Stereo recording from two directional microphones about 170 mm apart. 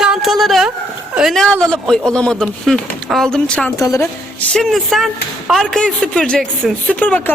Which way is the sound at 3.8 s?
20° left (ahead or behind).